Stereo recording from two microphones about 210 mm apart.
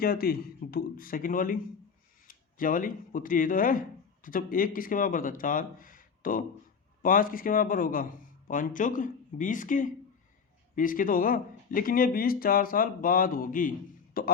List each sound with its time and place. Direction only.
0.0 s speech: 45° left (ahead or behind)